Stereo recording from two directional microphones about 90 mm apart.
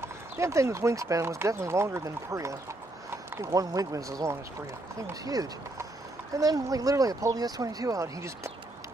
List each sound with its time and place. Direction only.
0.0 s speech: 30° right (ahead or behind)